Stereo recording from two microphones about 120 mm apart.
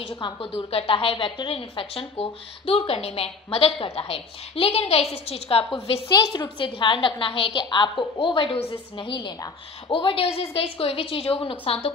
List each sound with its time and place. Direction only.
0.1 s a woman's voice: 45° left (ahead or behind)
6.2 s a woman's voice: 40° left (ahead or behind)